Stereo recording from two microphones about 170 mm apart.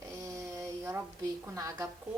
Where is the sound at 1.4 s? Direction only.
20° right (ahead or behind).